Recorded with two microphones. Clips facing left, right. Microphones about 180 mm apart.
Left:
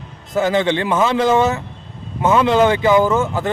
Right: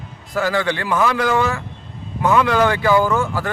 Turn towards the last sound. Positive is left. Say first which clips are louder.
# left 3 dB
turn(degrees=20)  # may be behind; listen again after turning